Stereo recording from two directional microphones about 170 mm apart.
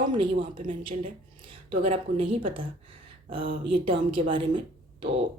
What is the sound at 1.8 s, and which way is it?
Speech, 35° right (ahead or behind).